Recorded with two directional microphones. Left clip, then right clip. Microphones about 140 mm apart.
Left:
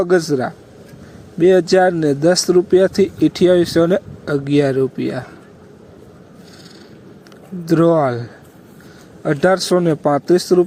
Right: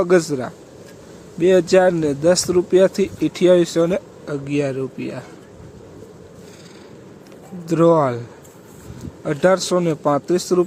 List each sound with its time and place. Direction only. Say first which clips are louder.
0.0 s a man's voice: left 1 dB; 15° left (ahead or behind)
7.7 s speech: left 1 dB; 20° left (ahead or behind)
9.2 s a man's voice: left 2 dB; 15° left (ahead or behind)